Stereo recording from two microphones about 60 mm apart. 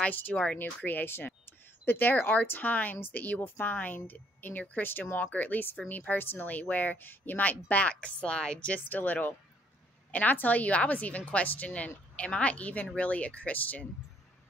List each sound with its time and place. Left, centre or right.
0.0 s a woman's voice: left